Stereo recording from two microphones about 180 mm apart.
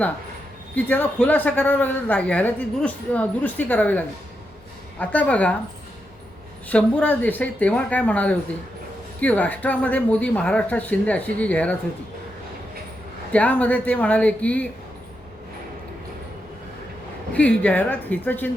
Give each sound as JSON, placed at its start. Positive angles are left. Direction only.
{"t": 0.9, "sound": "a woman's voice", "side_deg": 10}
{"t": 6.7, "sound": "a woman's voice", "side_deg": 10}
{"t": 13.3, "sound": "a woman's voice", "side_deg": 10}
{"t": 17.3, "sound": "a woman's voice", "side_deg": 5}